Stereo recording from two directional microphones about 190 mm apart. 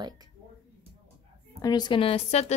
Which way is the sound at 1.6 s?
20° left (ahead or behind).